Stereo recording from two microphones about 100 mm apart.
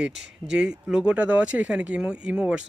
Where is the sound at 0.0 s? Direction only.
5° right (ahead or behind).